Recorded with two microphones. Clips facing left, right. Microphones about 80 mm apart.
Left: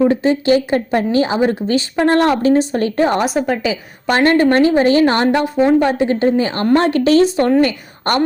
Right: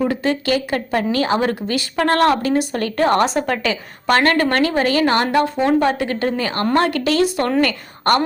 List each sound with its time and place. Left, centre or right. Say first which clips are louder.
0.0 s speech: left 5 dB; left
3.2 s a woman's voice: left 1 dB; centre
4.1 s a woman's voice: left 3 dB; left